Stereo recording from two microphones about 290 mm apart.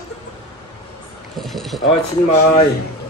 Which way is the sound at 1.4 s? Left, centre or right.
Centre.